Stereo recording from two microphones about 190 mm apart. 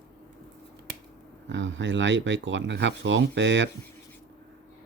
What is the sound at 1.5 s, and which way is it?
Speech, 75° right (ahead or behind).